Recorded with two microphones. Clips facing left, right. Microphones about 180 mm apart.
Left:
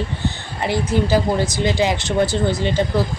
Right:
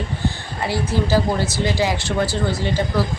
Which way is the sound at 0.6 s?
20° left (ahead or behind).